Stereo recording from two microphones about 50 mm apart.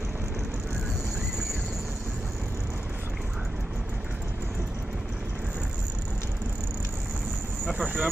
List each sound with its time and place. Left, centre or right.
7.7 s speech: right